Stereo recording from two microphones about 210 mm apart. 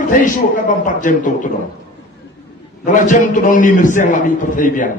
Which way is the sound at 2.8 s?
40° left (ahead or behind).